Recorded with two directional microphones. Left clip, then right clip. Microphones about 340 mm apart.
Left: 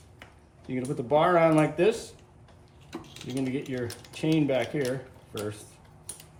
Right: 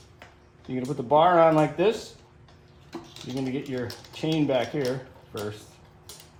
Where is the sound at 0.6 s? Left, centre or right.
Centre.